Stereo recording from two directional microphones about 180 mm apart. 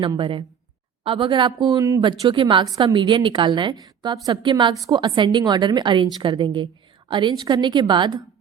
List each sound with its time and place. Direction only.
0.0 s a woman's voice: 30° right (ahead or behind)